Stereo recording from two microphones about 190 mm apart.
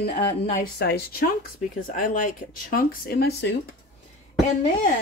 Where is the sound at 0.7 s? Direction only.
55° left (ahead or behind).